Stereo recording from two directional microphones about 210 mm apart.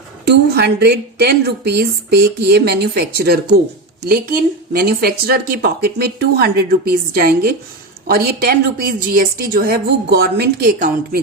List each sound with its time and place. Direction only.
0.3 s speech: 50° right (ahead or behind)